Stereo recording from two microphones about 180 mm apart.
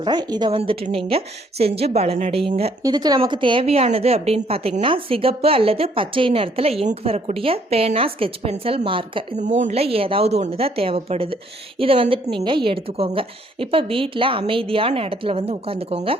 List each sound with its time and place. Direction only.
0.0 s a woman's voice: 25° right (ahead or behind)
2.8 s a woman's voice: 20° right (ahead or behind)